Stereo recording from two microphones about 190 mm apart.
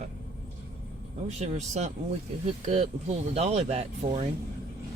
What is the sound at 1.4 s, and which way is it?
Speech, 35° right (ahead or behind).